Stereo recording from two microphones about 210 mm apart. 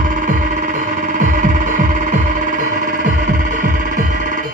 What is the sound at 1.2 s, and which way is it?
Music, 40° right (ahead or behind).